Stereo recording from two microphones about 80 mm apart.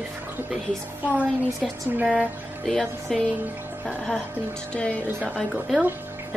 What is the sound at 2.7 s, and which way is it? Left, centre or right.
Speech, centre.